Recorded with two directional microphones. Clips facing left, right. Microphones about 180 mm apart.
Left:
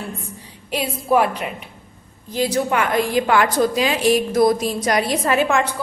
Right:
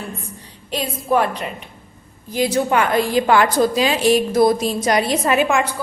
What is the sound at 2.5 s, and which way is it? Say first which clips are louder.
A woman's voice: right 3 dB; 30° right (ahead or behind).